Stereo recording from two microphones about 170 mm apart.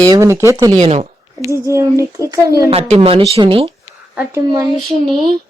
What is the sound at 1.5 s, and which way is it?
Speech, 15° right (ahead or behind).